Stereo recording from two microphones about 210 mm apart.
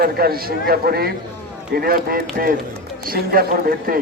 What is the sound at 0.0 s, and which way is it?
A man's voice, 45° right (ahead or behind).